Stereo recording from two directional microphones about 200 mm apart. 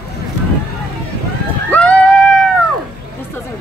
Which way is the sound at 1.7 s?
5° left (ahead or behind).